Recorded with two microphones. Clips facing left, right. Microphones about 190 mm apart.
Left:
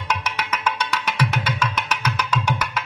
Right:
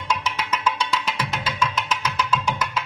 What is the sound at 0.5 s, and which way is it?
Music, 70° left (ahead or behind).